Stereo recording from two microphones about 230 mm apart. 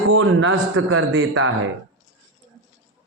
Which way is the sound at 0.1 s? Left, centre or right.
Right.